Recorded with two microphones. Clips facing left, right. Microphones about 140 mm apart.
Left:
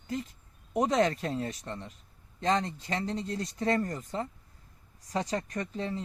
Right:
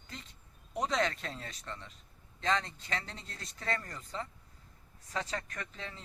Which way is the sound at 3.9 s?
45° left (ahead or behind).